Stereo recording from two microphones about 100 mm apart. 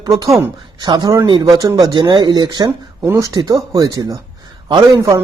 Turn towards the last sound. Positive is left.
turn(degrees=-45)  # may be behind; listen again after turning